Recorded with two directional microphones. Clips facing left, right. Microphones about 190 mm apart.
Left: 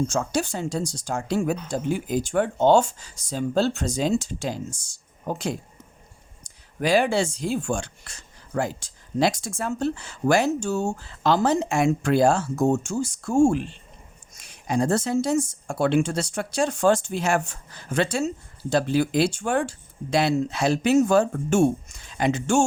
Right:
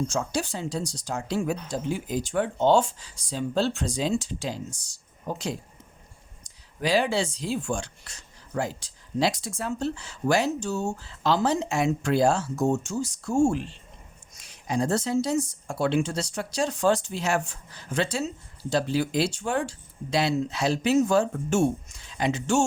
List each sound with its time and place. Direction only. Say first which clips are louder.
0.1 s speech: left 3 dB; 50° left (ahead or behind)